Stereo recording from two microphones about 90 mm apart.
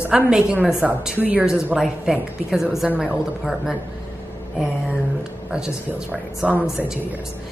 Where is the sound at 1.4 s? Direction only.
5° right (ahead or behind).